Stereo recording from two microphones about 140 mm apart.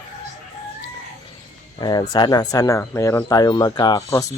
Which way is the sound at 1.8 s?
30° left (ahead or behind).